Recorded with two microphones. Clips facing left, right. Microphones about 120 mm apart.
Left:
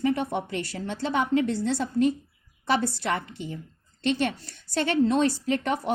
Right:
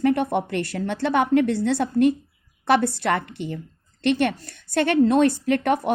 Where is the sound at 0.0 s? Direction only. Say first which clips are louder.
Right 5 dB; 60° right (ahead or behind).